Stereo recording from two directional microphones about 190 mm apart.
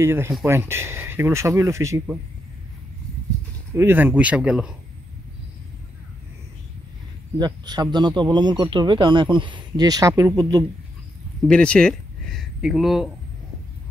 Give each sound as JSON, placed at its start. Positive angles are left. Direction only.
{"t": 0.0, "sound": "speech", "side_deg": -15}
{"t": 3.7, "sound": "speech", "side_deg": -10}
{"t": 7.3, "sound": "speech", "side_deg": -20}
{"t": 11.4, "sound": "speech", "side_deg": 5}